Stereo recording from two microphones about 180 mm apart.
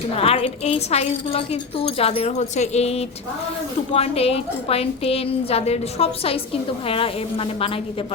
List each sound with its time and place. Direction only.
0.1 s a woman's voice: 30° left (ahead or behind)